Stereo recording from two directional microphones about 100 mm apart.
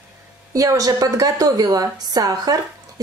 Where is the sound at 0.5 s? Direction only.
35° right (ahead or behind).